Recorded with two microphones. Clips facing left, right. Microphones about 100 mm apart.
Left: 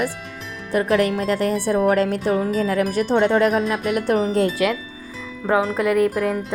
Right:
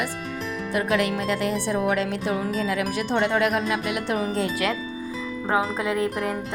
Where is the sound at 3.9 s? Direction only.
50° left (ahead or behind).